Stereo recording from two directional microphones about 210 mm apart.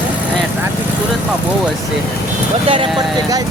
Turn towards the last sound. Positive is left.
turn(degrees=-15)  # may be behind; listen again after turning